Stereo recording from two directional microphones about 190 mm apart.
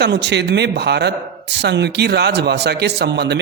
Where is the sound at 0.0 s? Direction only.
60° right (ahead or behind).